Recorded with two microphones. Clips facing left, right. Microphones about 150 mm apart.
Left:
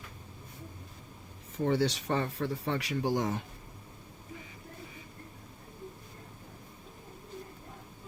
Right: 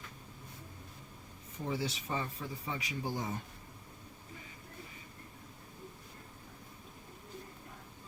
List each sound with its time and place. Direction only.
1.5 s speech: 75° left (ahead or behind)